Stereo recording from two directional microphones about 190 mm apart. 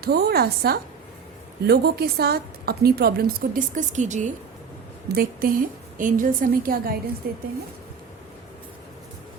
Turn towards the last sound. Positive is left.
turn(degrees=-50)  # may be behind; listen again after turning